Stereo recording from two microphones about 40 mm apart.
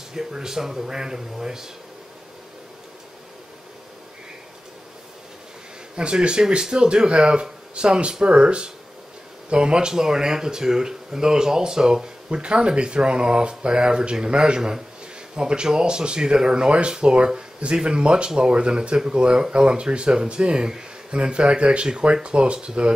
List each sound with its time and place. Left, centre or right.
0.1 s speech: centre
5.9 s speech: right
12.3 s speech: right